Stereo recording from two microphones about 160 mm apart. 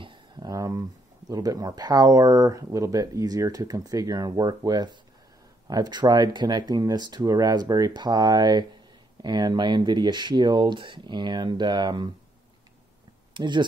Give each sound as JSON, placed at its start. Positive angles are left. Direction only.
{"t": 0.0, "sound": "speech", "side_deg": -25}
{"t": 13.3, "sound": "speech", "side_deg": -30}